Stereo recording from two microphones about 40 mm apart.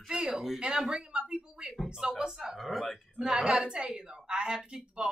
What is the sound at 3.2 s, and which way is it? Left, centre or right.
A woman's voice, centre.